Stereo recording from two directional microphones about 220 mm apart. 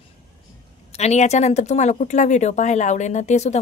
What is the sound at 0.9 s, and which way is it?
Speech, 30° left (ahead or behind).